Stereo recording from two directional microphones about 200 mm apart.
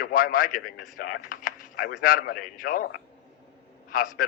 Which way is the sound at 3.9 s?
45° left (ahead or behind).